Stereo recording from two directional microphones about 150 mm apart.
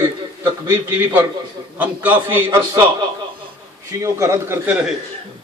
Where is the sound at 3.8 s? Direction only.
20° right (ahead or behind).